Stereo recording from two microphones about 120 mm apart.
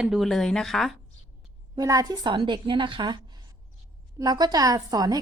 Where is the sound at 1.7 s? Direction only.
30° right (ahead or behind).